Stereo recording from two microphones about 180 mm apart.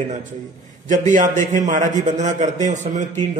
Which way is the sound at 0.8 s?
45° right (ahead or behind).